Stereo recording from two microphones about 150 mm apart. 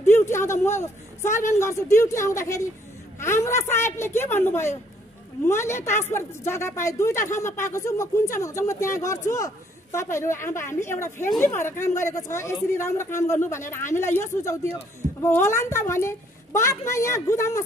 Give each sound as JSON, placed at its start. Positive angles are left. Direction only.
{"t": 0.0, "sound": "a woman's voice", "side_deg": 15}